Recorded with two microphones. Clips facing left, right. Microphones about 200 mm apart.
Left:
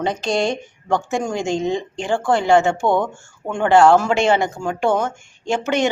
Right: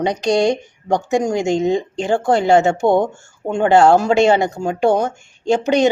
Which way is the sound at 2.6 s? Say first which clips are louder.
Right 3 dB; 40° right (ahead or behind).